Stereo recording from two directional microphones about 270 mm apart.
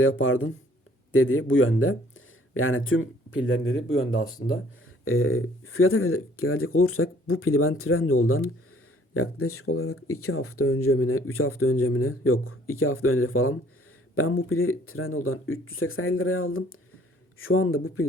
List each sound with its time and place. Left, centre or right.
0.0 s speech: left